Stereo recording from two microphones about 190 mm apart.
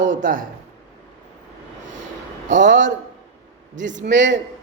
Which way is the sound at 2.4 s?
75° right (ahead or behind).